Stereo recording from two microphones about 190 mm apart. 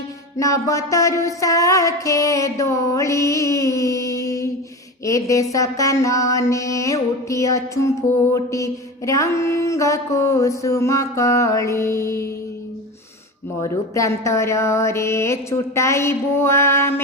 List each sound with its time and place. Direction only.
0.3 s mantra: 15° left (ahead or behind)
13.6 s mantra: 15° left (ahead or behind)